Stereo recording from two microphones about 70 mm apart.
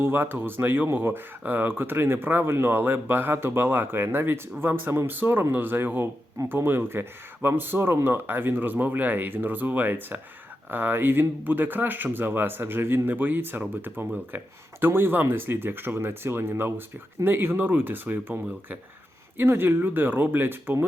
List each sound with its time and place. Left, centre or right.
0.0 s speech: right
19.4 s speech: right